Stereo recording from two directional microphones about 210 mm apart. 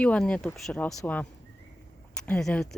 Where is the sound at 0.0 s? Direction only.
5° left (ahead or behind).